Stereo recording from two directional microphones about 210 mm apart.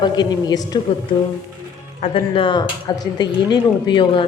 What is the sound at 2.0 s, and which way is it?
Speech, 25° left (ahead or behind).